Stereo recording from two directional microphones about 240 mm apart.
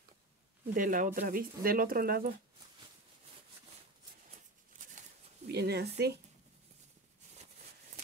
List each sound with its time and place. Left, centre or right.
0.7 s speech: right
4.3 s a sound: right
5.5 s speech: right